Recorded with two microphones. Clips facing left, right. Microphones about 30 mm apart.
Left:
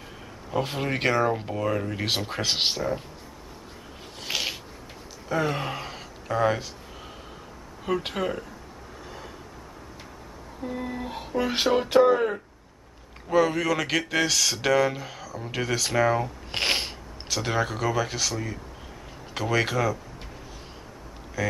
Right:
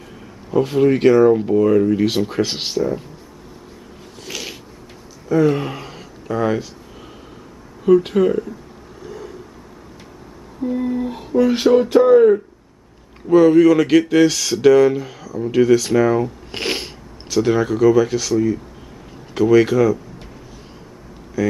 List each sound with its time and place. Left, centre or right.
0.5 s speech: centre
4.3 s a sound: left
5.3 s speech: centre
7.8 s speech: centre
9.0 s a sound: centre
10.6 s speech: centre
21.4 s speech: centre